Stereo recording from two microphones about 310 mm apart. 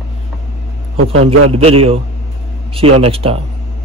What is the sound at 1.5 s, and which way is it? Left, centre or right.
A man's voice, centre.